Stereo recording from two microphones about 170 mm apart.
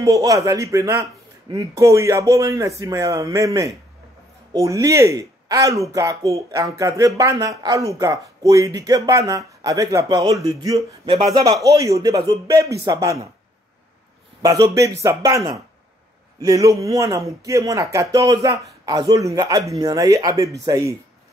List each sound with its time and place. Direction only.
0.0 s speech: 20° right (ahead or behind)
14.4 s speech: 20° right (ahead or behind)